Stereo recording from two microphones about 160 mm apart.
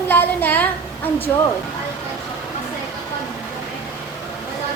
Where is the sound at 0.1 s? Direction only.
10° left (ahead or behind).